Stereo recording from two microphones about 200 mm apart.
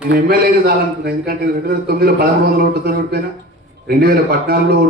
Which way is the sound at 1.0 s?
50° right (ahead or behind).